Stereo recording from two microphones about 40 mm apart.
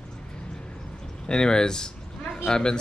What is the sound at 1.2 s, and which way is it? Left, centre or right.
Speech, centre.